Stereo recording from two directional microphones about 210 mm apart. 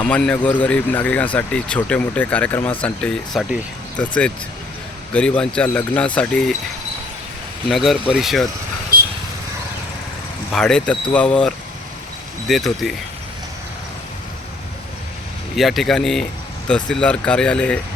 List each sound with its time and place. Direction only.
0.0 s speech: 5° left (ahead or behind)
7.7 s speech: centre (ahead or behind)
8.9 s vehicle: 45° right (ahead or behind)
10.5 s speech: 5° left (ahead or behind)
15.5 s speech: centre (ahead or behind)